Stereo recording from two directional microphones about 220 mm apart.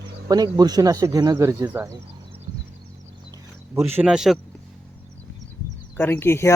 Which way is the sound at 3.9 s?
5° right (ahead or behind).